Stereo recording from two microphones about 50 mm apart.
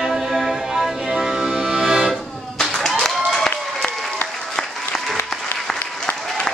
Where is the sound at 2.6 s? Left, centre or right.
Centre.